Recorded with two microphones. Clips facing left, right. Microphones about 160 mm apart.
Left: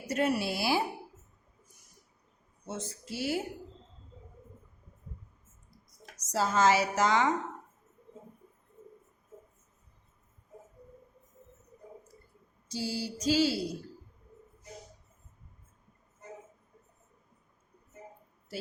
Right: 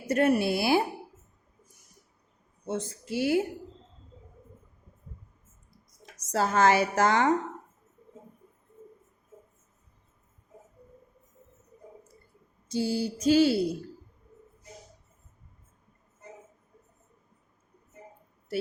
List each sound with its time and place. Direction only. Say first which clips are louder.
0.1 s a woman's voice: right 6 dB; 55° right (ahead or behind)
2.6 s a woman's voice: right 6 dB; 55° right (ahead or behind)
6.2 s a woman's voice: right 3 dB; 60° right (ahead or behind)
12.6 s a woman's voice: right 7 dB; 55° right (ahead or behind)